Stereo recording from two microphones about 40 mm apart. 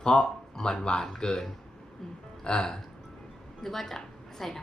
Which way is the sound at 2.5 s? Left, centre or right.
Left.